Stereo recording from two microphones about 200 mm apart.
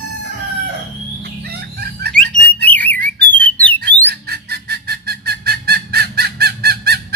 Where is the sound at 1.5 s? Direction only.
50° right (ahead or behind).